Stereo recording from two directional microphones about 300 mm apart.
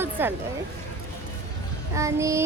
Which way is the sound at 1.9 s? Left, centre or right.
Centre.